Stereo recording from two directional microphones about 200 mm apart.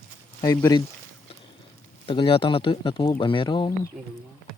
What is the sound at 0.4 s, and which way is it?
Speech, 20° left (ahead or behind).